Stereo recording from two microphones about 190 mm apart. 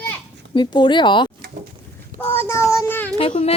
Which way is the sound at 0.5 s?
25° left (ahead or behind).